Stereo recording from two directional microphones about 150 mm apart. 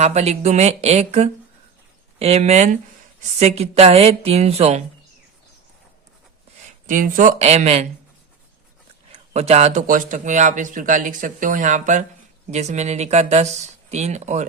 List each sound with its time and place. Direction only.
0.0 s speech: 50° right (ahead or behind)
6.8 s speech: 60° right (ahead or behind); by 7.9 s 45° right (ahead or behind)
9.3 s speech: 45° right (ahead or behind)
9.8 s speech: 60° right (ahead or behind)